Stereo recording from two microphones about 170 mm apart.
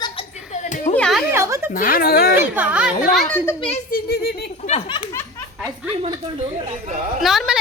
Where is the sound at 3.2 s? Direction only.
10° left (ahead or behind).